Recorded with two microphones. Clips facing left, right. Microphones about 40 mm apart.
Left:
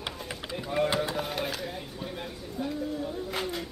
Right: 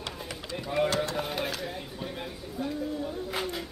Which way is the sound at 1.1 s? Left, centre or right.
Centre.